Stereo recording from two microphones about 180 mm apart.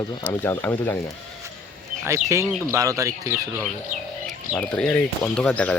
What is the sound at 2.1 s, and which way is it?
Speech, 15° right (ahead or behind).